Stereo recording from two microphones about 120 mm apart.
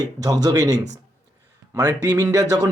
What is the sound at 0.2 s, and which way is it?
Speech, 30° right (ahead or behind).